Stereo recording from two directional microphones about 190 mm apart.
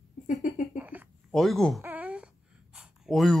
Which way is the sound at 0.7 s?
10° right (ahead or behind).